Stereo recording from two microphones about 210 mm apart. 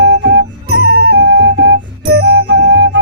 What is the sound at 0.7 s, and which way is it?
Music, 50° right (ahead or behind).